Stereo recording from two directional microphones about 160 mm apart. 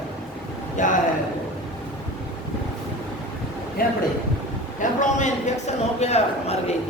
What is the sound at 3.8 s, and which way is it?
Speech, 65° left (ahead or behind).